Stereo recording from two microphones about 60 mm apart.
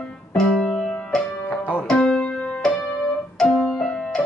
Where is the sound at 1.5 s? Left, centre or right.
Left.